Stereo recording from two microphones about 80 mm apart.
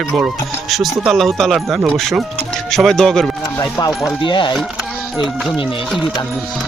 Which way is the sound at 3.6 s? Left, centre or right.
Left.